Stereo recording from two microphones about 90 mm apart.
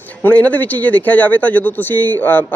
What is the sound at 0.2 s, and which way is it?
Speech, 20° left (ahead or behind).